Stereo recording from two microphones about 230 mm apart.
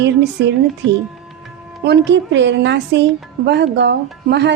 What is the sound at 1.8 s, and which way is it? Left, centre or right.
Speech, right.